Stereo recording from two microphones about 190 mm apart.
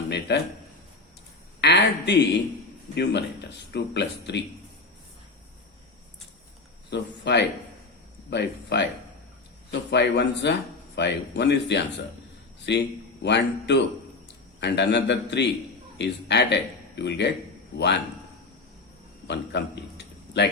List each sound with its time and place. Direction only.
0.1 s speech: 65° left (ahead or behind)
1.6 s speech: 65° left (ahead or behind)
6.9 s speech: 65° left (ahead or behind)
9.9 s speech: 65° left (ahead or behind)
19.3 s a sound: 65° left (ahead or behind)